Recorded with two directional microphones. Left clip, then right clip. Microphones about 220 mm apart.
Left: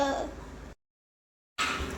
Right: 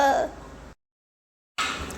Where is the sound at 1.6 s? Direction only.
Centre (ahead or behind).